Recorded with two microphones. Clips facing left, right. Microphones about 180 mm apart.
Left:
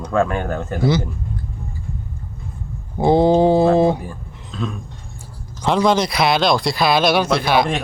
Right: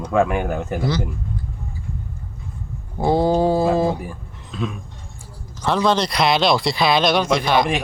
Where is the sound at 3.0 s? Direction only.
20° left (ahead or behind).